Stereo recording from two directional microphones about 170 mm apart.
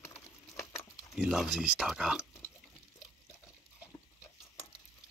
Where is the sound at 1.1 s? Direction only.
5° right (ahead or behind).